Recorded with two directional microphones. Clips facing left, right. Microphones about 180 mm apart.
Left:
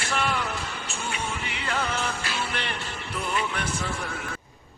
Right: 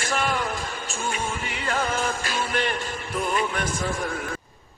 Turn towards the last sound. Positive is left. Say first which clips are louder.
# right 4 dB
turn(degrees=-50)  # may be behind; listen again after turning